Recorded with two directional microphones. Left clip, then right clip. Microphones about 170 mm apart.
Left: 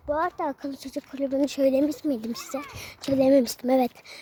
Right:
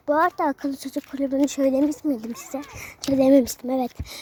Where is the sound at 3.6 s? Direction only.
15° left (ahead or behind).